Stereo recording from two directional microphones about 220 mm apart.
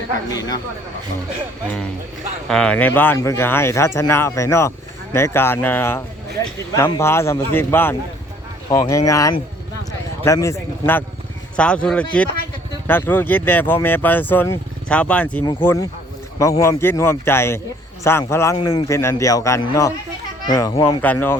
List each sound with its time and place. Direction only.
0.3 s speech: 15° left (ahead or behind)
2.5 s speech: 5° left (ahead or behind)